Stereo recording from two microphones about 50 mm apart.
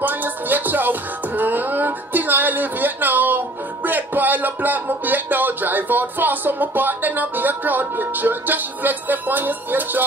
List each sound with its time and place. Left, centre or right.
0.0 s music: right